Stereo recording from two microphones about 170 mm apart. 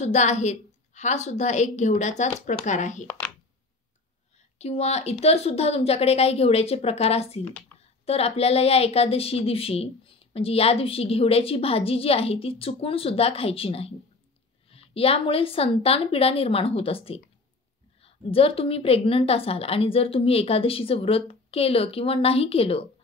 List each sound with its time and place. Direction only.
0.0 s a woman's voice: 40° left (ahead or behind)
4.6 s a woman's voice: 40° left (ahead or behind)